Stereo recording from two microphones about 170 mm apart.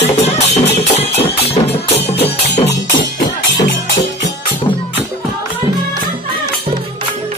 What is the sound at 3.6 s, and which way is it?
Music, 90° left.